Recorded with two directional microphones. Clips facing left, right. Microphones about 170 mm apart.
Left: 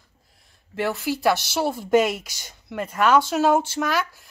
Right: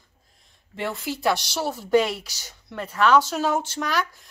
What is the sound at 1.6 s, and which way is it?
Speech, 50° left (ahead or behind).